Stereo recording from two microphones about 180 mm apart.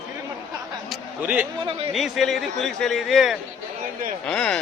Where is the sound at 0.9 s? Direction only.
10° right (ahead or behind).